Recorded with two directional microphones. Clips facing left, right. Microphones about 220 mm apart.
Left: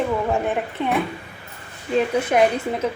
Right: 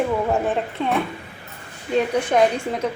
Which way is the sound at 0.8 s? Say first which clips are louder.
Left 1 dB; 15° left (ahead or behind).